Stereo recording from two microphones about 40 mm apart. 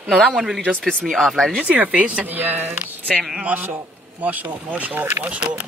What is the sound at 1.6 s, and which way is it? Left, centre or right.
A man's voice, right.